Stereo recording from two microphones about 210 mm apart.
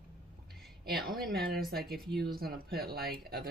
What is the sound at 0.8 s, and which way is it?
Speech, 45° right (ahead or behind).